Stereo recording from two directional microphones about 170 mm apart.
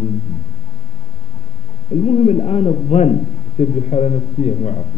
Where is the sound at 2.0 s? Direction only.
40° left (ahead or behind).